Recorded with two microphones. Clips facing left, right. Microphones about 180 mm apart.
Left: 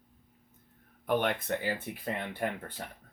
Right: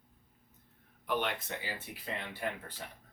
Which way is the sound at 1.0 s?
50° left (ahead or behind).